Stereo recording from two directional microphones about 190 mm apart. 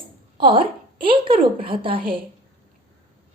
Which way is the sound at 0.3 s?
25° right (ahead or behind).